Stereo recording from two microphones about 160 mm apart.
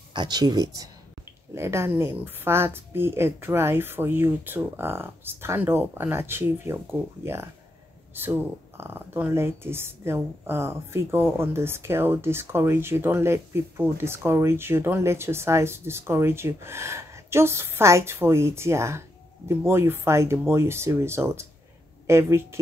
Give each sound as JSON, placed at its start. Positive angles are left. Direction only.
{"t": 0.1, "sound": "speech", "side_deg": -25}